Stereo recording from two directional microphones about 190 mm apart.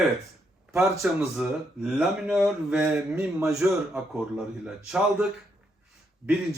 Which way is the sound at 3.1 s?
15° right (ahead or behind).